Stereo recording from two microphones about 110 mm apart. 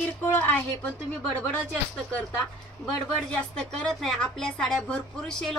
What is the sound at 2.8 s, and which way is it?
A woman's voice, 5° left (ahead or behind).